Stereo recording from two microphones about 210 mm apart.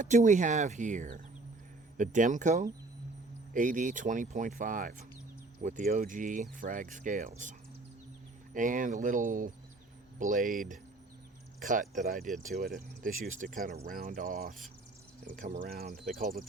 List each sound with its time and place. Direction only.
0.0 s speech: 35° right (ahead or behind)
8.5 s speech: 40° right (ahead or behind)